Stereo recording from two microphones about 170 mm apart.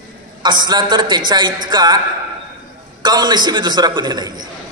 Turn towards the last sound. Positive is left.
turn(degrees=-25)  # may be behind; listen again after turning